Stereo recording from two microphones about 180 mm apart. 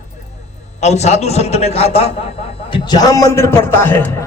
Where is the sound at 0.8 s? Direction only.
40° left (ahead or behind).